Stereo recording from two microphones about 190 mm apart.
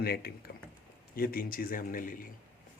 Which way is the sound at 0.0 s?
55° left (ahead or behind).